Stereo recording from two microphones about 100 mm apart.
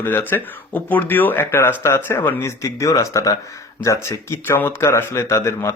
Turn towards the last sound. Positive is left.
turn(degrees=25)  # may be behind; listen again after turning